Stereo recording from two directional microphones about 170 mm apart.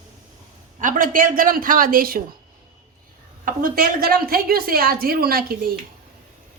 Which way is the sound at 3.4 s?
55° right (ahead or behind).